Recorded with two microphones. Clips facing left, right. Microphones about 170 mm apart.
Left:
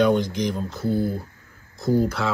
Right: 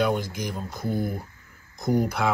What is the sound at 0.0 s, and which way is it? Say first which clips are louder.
Speech: left 6 dB; 5° right (ahead or behind).